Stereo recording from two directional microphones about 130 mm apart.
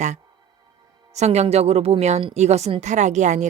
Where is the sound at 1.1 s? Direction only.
60° right (ahead or behind).